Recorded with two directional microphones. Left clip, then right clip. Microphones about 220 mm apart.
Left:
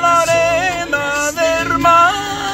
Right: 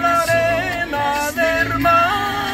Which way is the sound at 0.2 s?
20° left (ahead or behind).